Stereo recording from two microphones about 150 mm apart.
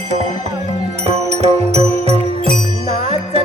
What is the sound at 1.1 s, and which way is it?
Music, 45° right (ahead or behind).